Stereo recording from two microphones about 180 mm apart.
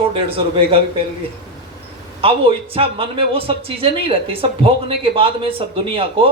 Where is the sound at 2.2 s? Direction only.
30° right (ahead or behind).